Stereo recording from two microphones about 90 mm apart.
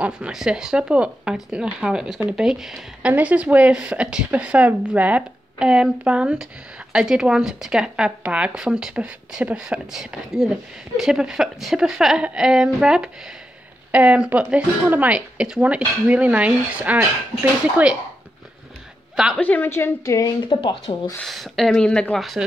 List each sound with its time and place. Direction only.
0.0 s a woman's voice: 10° right (ahead or behind)
3.1 s a woman's voice: 15° right (ahead or behind)
19.4 s speech: 15° left (ahead or behind)
19.7 s a woman's voice: 30° left (ahead or behind)
20.4 s speech: 60° left (ahead or behind)
21.2 s speech: centre (ahead or behind)